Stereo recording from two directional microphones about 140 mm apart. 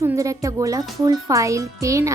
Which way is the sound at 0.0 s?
20° right (ahead or behind).